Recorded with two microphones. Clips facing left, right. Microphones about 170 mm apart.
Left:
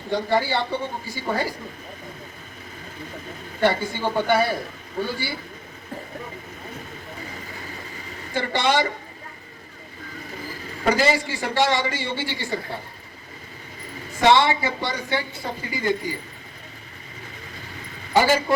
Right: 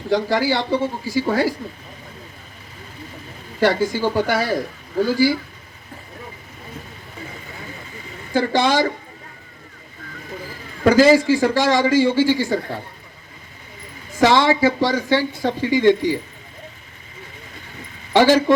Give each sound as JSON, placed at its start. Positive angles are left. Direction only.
{"t": 0.1, "sound": "speech", "side_deg": -90}
{"t": 3.6, "sound": "speech", "side_deg": -90}
{"t": 8.3, "sound": "speech", "side_deg": -90}
{"t": 10.8, "sound": "speech", "side_deg": -90}
{"t": 14.2, "sound": "speech", "side_deg": -90}
{"t": 18.1, "sound": "speech", "side_deg": -90}